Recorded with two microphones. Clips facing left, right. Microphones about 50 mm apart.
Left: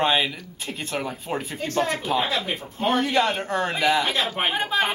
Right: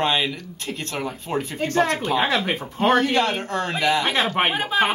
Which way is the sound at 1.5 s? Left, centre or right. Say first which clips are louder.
Right 4 dB; right.